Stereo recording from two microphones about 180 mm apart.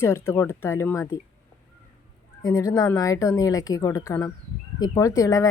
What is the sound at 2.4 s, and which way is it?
A woman's voice, 20° left (ahead or behind).